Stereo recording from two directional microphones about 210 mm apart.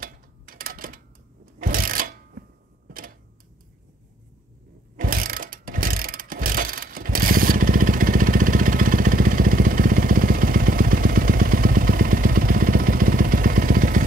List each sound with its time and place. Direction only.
0.0 s sewing machine: 45° right (ahead or behind)
2.9 s a sound: 40° right (ahead or behind)
4.9 s ratchet: 40° right (ahead or behind)